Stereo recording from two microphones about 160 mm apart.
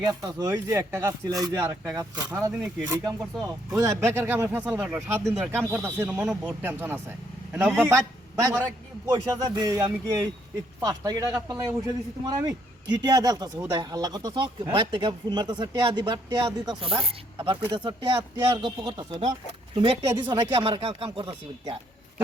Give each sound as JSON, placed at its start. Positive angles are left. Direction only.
{"t": 0.0, "sound": "a man's voice", "side_deg": -25}